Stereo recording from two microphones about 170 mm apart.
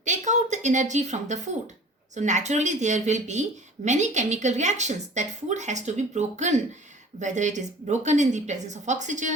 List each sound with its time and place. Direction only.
0.0 s a woman's voice: 45° right (ahead or behind)